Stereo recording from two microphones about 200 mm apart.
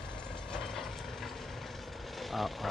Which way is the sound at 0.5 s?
Centre (ahead or behind).